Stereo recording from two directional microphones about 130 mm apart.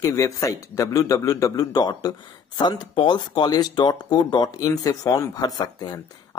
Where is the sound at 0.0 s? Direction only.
25° left (ahead or behind).